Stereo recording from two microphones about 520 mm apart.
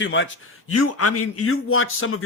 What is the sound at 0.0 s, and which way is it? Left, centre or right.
A man's voice, left.